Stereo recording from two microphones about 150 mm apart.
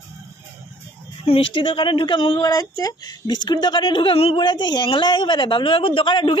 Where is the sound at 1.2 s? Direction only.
35° left (ahead or behind).